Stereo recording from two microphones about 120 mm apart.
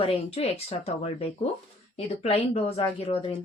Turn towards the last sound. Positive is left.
turn(degrees=50)  # may be behind; listen again after turning